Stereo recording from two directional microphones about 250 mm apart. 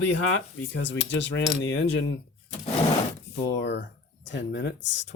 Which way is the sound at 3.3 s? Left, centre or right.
Left.